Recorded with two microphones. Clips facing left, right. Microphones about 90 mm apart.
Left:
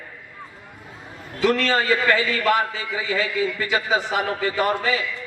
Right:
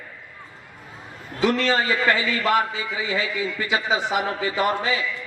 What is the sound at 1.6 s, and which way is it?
A man's voice, 25° right (ahead or behind).